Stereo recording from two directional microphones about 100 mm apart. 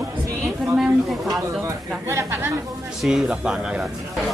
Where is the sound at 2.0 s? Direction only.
25° right (ahead or behind).